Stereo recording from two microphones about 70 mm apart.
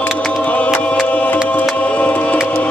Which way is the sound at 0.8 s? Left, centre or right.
Centre.